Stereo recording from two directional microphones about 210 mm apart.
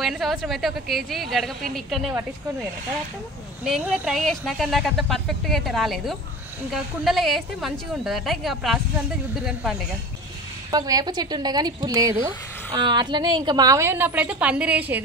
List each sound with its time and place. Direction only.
0.0 s speech: centre (ahead or behind)
3.6 s speech: 5° right (ahead or behind)
10.7 s a woman's voice: 20° right (ahead or behind)